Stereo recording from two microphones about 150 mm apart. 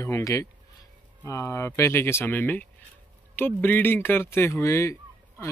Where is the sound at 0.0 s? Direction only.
20° left (ahead or behind).